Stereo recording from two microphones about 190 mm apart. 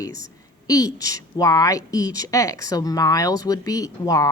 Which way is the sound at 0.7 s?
20° left (ahead or behind).